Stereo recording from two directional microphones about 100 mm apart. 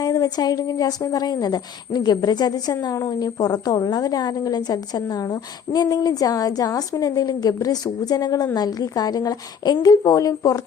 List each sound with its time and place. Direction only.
0.0 s a woman's voice: 40° left (ahead or behind)